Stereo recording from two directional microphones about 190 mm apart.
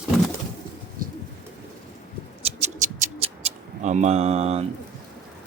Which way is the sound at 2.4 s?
35° right (ahead or behind).